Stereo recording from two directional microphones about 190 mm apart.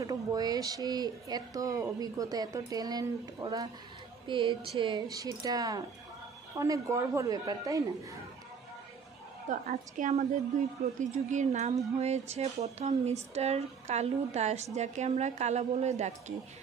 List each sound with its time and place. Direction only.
0.0 s a woman's voice: 20° right (ahead or behind)
9.5 s speech: 40° right (ahead or behind)